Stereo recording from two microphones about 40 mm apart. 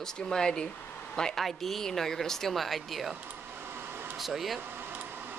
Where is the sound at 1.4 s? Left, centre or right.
Centre.